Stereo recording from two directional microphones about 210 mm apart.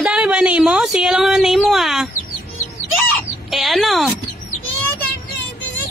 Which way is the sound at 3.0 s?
Centre (ahead or behind).